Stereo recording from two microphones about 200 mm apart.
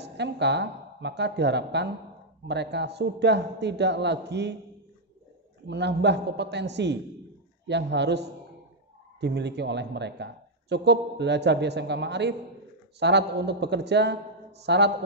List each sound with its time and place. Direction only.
0.0 s speech: 60° right (ahead or behind)
5.7 s speech: 60° right (ahead or behind)